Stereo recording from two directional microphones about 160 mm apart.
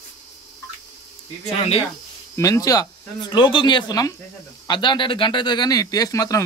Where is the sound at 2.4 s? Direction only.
20° left (ahead or behind).